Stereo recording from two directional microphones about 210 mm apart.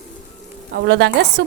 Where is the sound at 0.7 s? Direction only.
55° right (ahead or behind).